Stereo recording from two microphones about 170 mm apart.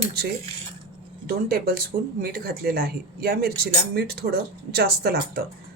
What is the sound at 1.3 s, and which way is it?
A woman's voice, 60° right (ahead or behind).